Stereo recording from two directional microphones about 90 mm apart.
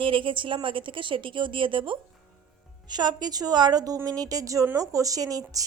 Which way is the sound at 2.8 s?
50° right (ahead or behind).